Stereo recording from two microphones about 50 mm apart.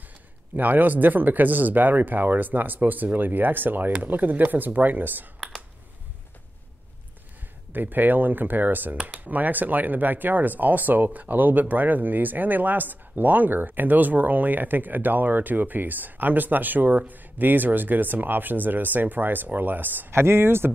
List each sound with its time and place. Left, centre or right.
0.6 s speech: right
7.7 s speech: right
20.1 s speech: right